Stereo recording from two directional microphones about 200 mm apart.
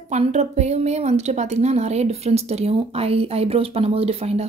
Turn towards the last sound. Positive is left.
turn(degrees=-30)  # may be behind; listen again after turning